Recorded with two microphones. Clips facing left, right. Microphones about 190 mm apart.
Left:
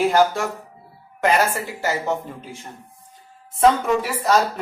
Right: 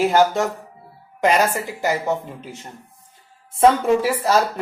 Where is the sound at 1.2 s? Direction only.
15° right (ahead or behind).